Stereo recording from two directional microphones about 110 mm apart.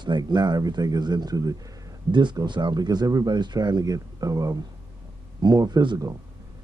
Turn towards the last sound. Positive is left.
turn(degrees=-40)  # may be behind; listen again after turning